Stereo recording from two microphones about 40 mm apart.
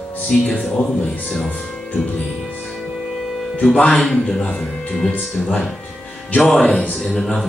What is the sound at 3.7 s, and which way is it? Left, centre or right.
Speech, left.